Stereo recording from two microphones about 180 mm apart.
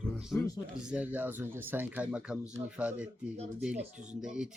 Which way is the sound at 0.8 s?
5° right (ahead or behind).